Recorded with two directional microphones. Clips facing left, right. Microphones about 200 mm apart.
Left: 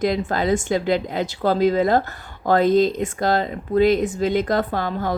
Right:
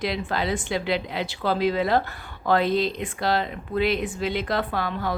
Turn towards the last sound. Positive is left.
turn(degrees=45)  # may be behind; listen again after turning